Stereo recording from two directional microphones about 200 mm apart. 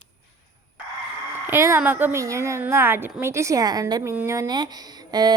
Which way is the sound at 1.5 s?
10° right (ahead or behind).